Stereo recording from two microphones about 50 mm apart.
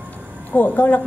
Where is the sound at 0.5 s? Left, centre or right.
Left.